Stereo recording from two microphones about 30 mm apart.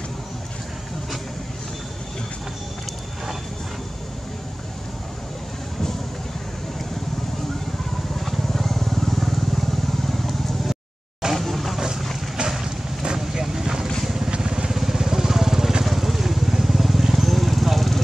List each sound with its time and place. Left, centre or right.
8.3 s vehicle: centre
11.3 s a sound: centre
12.4 s vehicle: right
13.2 s vehicle: centre
14.7 s vehicle: centre